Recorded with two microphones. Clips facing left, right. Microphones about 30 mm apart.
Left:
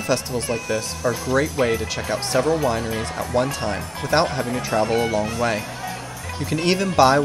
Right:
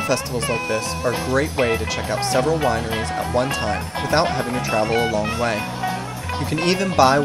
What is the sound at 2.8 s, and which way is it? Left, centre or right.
Speech, right.